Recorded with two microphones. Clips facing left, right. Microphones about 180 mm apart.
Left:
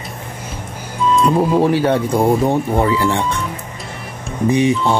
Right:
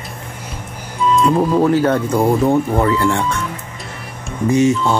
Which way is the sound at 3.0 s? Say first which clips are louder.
Right 1 dB; 20° left (ahead or behind).